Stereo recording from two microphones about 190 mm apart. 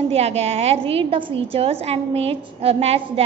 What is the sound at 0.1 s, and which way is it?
A woman's voice, 35° right (ahead or behind).